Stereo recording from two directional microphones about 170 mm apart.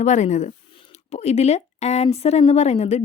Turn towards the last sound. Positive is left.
turn(degrees=40)  # may be behind; listen again after turning